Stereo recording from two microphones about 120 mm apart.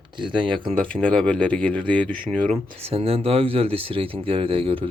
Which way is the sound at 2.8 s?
55° right (ahead or behind).